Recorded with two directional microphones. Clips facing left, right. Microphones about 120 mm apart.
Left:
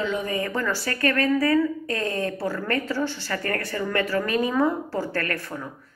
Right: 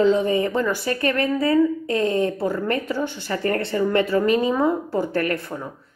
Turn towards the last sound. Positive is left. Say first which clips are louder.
# right 5 dB
turn(degrees=-20)  # may be behind; listen again after turning